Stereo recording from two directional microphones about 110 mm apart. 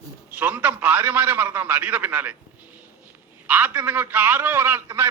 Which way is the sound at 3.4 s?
20° right (ahead or behind).